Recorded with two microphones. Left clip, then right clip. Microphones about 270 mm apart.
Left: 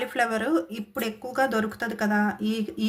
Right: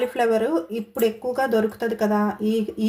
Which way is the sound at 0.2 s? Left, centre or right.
Left.